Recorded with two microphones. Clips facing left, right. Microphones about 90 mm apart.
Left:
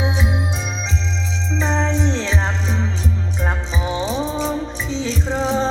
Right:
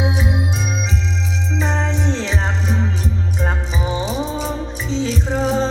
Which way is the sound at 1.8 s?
10° right (ahead or behind).